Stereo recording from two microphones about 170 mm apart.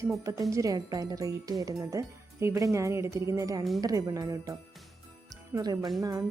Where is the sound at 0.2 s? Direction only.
20° right (ahead or behind).